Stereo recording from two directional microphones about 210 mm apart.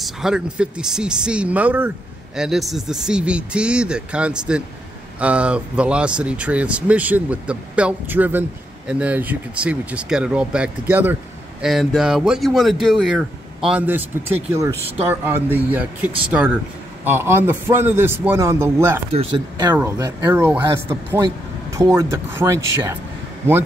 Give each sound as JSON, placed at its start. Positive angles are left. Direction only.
{"t": 0.0, "sound": "speech", "side_deg": -5}
{"t": 19.1, "sound": "speech", "side_deg": -20}